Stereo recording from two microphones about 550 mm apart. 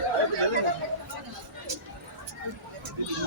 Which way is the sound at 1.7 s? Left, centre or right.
Right.